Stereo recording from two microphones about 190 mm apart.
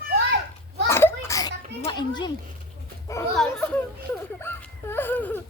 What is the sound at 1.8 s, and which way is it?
Speech, 25° left (ahead or behind).